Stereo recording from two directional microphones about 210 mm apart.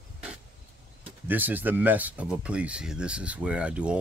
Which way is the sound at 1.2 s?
10° right (ahead or behind).